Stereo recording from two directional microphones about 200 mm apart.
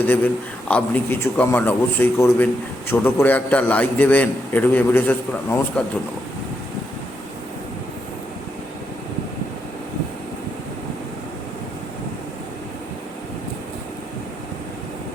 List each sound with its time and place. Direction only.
0.0 s a man's voice: 10° left (ahead or behind)